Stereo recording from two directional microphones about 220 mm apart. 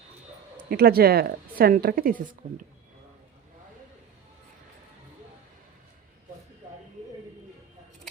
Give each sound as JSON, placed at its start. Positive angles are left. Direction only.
{"t": 0.5, "sound": "a woman's voice", "side_deg": -45}